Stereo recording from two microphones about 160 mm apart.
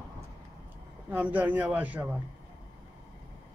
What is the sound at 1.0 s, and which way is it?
A man's voice, 10° right (ahead or behind).